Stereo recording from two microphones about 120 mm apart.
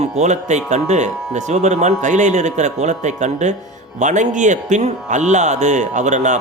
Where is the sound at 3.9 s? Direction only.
90° right.